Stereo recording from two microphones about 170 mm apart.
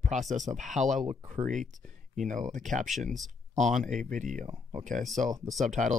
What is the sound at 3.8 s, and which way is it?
Speech, 50° right (ahead or behind).